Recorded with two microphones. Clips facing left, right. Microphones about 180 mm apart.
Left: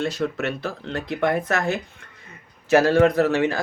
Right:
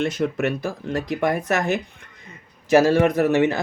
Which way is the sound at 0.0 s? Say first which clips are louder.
Right 2 dB; 20° right (ahead or behind).